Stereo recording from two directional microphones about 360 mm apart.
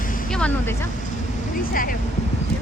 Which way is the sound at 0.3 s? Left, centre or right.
Centre.